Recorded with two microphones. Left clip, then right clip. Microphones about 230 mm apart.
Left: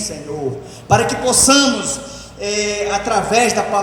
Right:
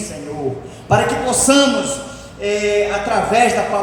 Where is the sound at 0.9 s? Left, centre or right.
Left.